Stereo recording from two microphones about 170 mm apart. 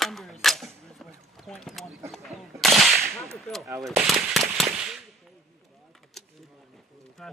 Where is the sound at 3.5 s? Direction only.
5° left (ahead or behind).